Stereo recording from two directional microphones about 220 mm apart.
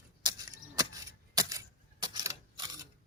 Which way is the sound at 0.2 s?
20° right (ahead or behind).